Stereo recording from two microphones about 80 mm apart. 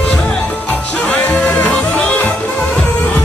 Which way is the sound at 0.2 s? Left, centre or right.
Centre.